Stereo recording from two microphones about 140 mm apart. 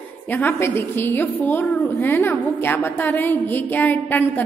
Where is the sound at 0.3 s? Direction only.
15° left (ahead or behind).